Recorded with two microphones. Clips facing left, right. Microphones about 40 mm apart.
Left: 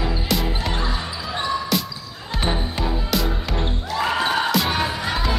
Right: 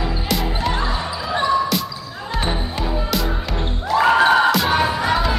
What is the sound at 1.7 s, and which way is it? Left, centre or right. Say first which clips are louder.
Basketball bounce: right 1 dB; centre.